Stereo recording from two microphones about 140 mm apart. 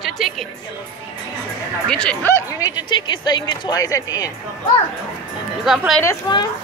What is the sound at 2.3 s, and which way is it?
Speech, 30° left (ahead or behind).